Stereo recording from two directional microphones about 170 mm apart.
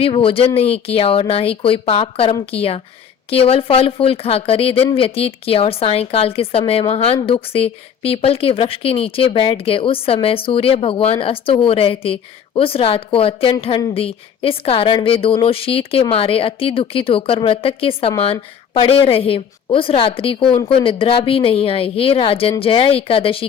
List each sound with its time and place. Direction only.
0.0 s speech: 35° left (ahead or behind)